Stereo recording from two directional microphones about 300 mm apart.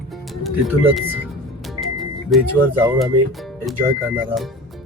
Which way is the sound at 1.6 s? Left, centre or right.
Centre.